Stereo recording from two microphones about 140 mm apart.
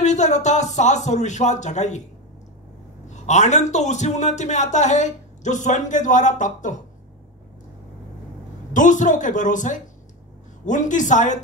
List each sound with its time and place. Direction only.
0.0 s a man's voice: 55° left (ahead or behind)
3.1 s a man's voice: 55° left (ahead or behind)
8.7 s a man's voice: 65° left (ahead or behind)